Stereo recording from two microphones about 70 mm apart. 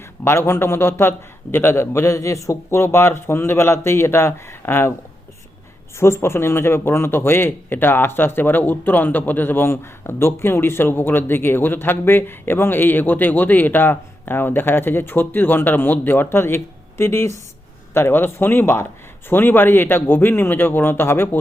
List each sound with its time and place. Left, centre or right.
0.3 s a man's voice: left
6.0 s a man's voice: left
17.9 s a man's voice: left